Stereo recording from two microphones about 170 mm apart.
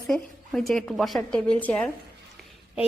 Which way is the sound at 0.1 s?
5° left (ahead or behind).